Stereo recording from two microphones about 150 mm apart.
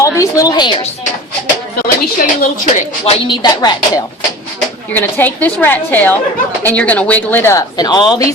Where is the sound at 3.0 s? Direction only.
30° left (ahead or behind).